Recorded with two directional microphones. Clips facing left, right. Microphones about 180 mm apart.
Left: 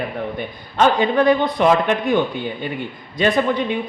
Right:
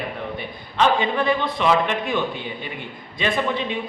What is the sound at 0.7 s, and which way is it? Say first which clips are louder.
A man's voice: left 4 dB; 45° left (ahead or behind).